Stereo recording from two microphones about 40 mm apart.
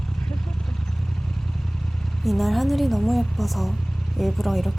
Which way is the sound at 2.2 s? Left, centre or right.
Centre.